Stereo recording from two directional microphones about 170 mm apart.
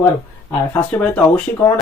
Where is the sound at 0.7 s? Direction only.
10° left (ahead or behind).